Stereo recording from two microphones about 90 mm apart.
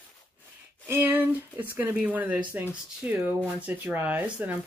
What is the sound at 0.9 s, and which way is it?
Speech, 25° right (ahead or behind).